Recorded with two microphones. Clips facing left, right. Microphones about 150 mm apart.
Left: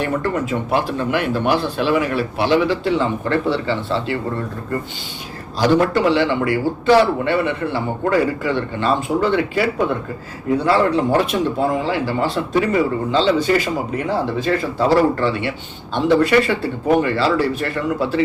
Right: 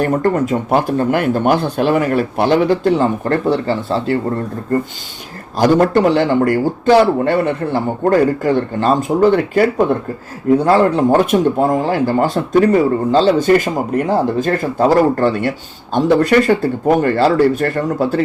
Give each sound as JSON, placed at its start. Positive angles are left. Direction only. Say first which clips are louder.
{"t": 0.0, "sound": "speech", "louder": "right 6 dB", "side_deg": -45}
{"t": 5.5, "sound": "speech", "louder": "right 4 dB", "side_deg": -45}